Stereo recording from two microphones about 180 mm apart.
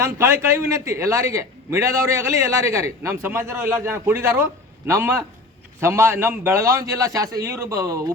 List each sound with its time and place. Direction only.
0.0 s a man's voice: 15° right (ahead or behind)